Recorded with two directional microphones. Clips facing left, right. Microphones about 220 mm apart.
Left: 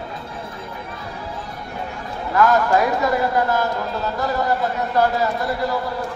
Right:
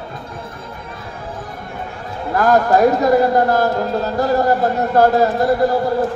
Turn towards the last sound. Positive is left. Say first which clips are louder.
# right 8 dB
turn(degrees=-45)  # may be behind; listen again after turning